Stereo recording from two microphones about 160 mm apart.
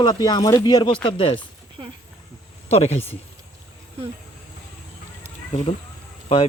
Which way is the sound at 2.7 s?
40° left (ahead or behind).